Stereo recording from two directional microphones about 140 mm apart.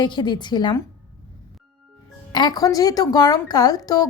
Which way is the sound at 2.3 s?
30° left (ahead or behind).